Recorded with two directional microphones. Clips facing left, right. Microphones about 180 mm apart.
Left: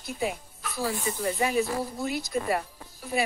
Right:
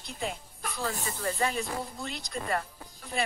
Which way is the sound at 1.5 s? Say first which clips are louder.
Left 7 dB; 5° left (ahead or behind).